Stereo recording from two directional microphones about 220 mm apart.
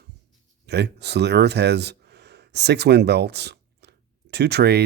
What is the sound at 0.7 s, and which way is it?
Speech, 50° right (ahead or behind).